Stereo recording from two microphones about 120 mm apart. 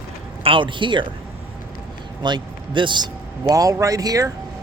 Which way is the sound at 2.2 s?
40° right (ahead or behind).